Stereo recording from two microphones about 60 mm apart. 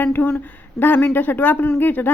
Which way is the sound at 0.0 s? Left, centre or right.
Left.